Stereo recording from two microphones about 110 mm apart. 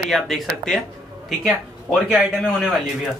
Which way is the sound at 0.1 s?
5° left (ahead or behind).